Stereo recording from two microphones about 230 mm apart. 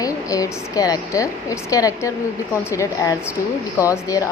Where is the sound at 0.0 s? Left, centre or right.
Centre.